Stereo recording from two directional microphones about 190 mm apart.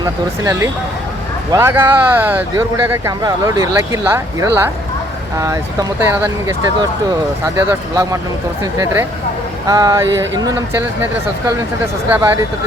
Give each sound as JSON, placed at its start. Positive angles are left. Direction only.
{"t": 0.0, "sound": "speech", "side_deg": -20}
{"t": 6.0, "sound": "speech", "side_deg": -10}
{"t": 12.0, "sound": "speech", "side_deg": -10}